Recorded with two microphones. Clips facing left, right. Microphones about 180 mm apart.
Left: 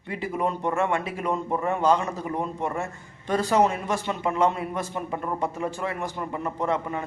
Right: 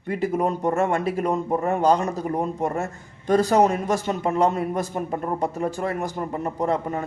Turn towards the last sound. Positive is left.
turn(degrees=-40)  # may be behind; listen again after turning